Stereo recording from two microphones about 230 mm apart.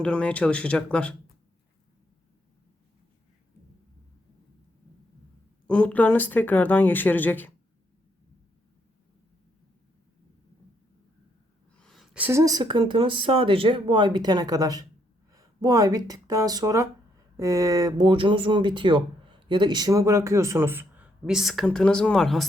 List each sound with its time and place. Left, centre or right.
0.0 s speech: centre
5.6 s speech: centre
11.8 s speech: centre